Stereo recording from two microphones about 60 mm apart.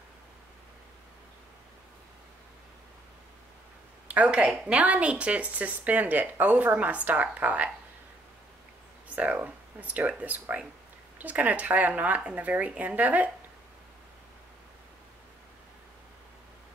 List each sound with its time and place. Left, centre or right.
4.1 s speech: right
9.1 s speech: right